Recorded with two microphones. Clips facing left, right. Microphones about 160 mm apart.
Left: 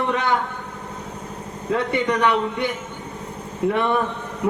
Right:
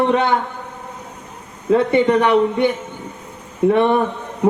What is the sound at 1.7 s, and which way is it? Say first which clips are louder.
A man's voice: right 8 dB; 20° right (ahead or behind).